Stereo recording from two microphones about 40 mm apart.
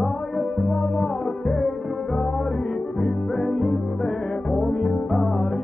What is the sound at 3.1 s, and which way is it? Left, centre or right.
Music, centre.